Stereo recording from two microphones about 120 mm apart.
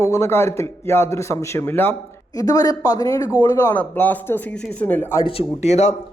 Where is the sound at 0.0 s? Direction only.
25° left (ahead or behind).